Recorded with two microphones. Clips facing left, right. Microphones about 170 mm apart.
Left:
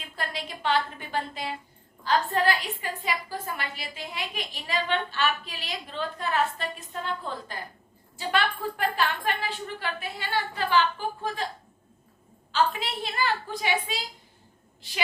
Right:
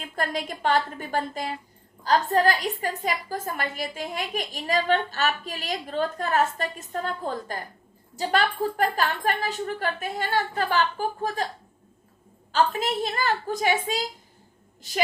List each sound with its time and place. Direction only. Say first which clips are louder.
0.2 s a woman's voice: right 6 dB; 45° right (ahead or behind)
12.5 s a woman's voice: right 3 dB; 45° right (ahead or behind)